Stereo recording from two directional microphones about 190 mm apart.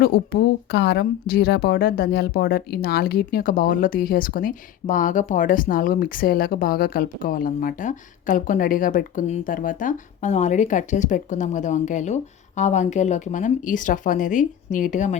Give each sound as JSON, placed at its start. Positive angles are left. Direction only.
{"t": 0.1, "sound": "a woman's voice", "side_deg": 55}